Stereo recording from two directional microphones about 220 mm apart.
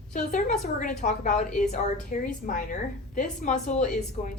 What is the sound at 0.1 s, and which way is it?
Speech, 35° left (ahead or behind).